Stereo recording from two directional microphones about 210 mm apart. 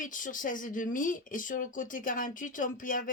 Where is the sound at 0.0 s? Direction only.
40° left (ahead or behind).